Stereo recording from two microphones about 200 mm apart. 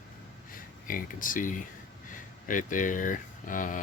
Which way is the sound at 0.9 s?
45° left (ahead or behind).